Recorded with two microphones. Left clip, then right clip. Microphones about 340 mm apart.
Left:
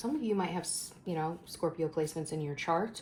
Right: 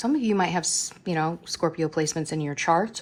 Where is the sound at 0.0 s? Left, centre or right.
Right.